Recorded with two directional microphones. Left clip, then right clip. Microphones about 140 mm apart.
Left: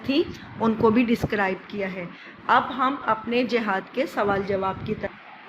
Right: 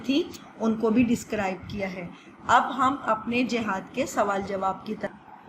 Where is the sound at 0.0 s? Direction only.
40° left (ahead or behind).